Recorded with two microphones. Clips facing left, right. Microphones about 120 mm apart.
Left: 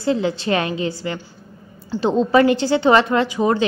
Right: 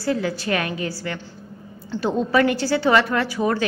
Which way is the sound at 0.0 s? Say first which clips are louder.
Left 3 dB; 25° left (ahead or behind).